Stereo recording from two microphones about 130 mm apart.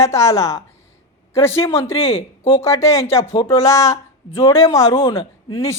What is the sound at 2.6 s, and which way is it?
Speech, 25° left (ahead or behind).